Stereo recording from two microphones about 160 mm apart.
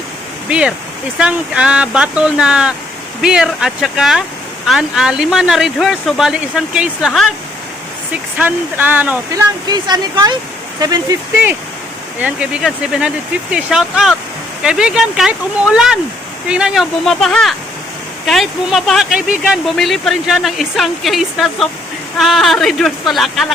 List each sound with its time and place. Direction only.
0.4 s speech: 5° right (ahead or behind)
9.3 s speech: 25° right (ahead or behind)
12.2 s speech: 5° right (ahead or behind)